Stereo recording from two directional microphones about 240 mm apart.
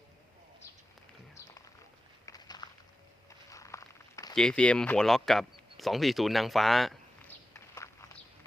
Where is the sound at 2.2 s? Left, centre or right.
Centre.